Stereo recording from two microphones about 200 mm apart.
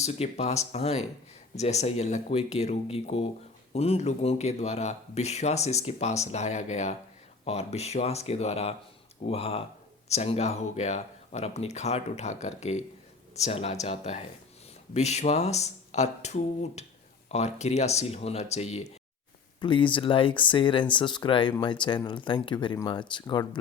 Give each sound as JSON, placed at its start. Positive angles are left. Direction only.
{"t": 0.0, "sound": "speech", "side_deg": 30}